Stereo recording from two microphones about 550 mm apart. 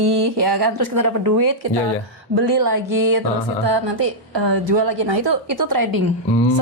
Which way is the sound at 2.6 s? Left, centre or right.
Right.